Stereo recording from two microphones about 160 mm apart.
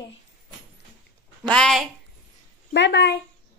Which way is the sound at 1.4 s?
5° left (ahead or behind).